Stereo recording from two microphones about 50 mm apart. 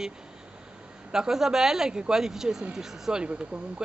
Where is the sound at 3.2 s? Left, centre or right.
Centre.